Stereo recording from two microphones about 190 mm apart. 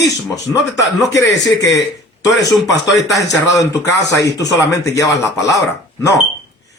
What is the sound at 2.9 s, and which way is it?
Speech, centre (ahead or behind).